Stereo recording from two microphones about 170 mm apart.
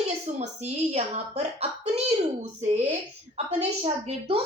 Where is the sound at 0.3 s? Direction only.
40° right (ahead or behind).